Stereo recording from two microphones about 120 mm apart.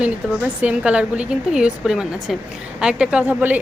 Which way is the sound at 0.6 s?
10° right (ahead or behind).